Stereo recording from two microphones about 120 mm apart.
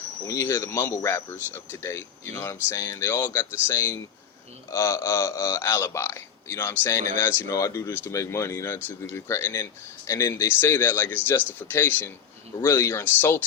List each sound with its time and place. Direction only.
0.3 s speech: 25° left (ahead or behind)